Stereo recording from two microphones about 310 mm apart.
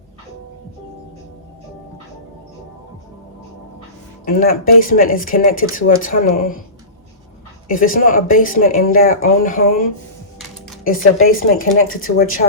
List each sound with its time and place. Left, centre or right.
4.3 s speech: left
7.7 s speech: left
10.8 s speech: left